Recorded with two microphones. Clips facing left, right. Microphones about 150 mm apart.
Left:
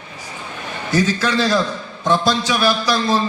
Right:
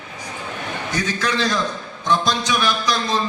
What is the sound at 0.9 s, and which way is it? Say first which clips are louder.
A man's voice: left 6 dB; 30° left (ahead or behind).